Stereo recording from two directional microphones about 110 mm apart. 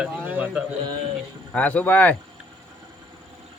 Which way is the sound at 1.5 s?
10° left (ahead or behind).